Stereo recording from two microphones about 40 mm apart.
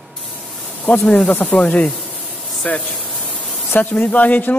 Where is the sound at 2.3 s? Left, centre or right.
Centre.